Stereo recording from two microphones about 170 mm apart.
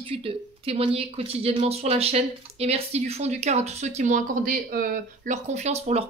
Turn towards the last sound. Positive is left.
turn(degrees=-40)  # may be behind; listen again after turning